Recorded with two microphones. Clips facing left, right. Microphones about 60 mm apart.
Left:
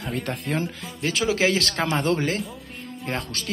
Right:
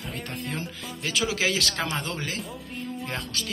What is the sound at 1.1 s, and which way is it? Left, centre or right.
Speech, left.